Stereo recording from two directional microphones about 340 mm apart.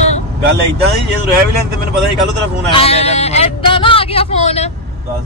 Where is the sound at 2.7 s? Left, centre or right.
Centre.